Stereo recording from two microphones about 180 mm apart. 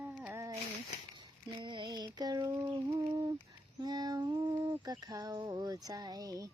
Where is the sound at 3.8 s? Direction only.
20° right (ahead or behind).